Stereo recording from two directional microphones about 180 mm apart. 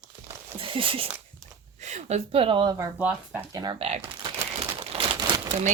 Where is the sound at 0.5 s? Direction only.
30° right (ahead or behind).